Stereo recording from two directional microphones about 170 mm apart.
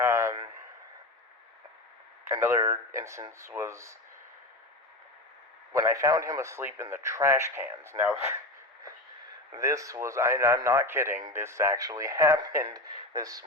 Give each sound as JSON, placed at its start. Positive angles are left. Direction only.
{"t": 0.0, "sound": "a sound", "side_deg": -15}
{"t": 2.2, "sound": "a man's voice", "side_deg": -15}
{"t": 5.7, "sound": "a man's voice", "side_deg": -20}
{"t": 9.5, "sound": "a man's voice", "side_deg": -20}